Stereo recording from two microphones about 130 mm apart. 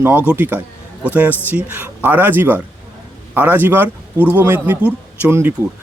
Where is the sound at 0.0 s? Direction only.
15° right (ahead or behind).